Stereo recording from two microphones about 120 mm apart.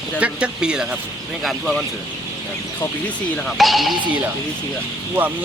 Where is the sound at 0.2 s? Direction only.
10° right (ahead or behind).